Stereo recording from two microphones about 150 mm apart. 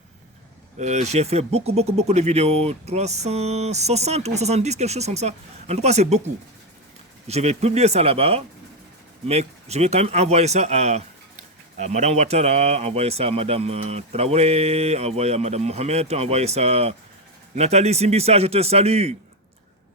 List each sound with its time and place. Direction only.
0.8 s speech: 50° right (ahead or behind)
7.3 s speech: 45° right (ahead or behind)